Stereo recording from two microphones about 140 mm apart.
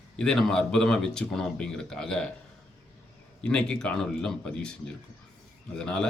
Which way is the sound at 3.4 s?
5° left (ahead or behind).